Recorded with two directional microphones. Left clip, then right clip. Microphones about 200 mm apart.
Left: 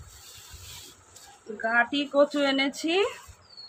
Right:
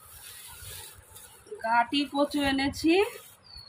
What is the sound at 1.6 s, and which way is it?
Speech, 25° left (ahead or behind).